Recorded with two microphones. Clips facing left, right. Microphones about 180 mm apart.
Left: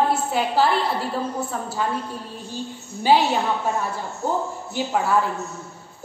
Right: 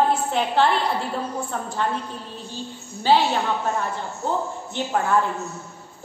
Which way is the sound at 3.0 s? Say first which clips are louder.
Left 1 dB; 10° left (ahead or behind).